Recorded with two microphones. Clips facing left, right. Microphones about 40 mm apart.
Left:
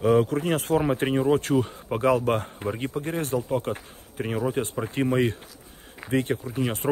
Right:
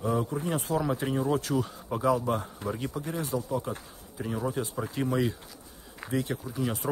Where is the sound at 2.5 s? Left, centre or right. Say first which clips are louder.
Left 4 dB; left.